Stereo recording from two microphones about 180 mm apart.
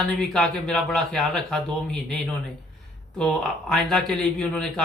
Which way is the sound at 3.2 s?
5° left (ahead or behind).